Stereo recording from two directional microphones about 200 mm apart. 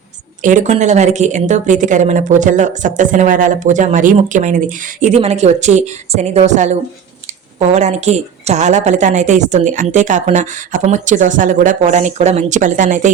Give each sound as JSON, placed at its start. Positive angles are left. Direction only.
{"t": 0.4, "sound": "a woman's voice", "side_deg": -40}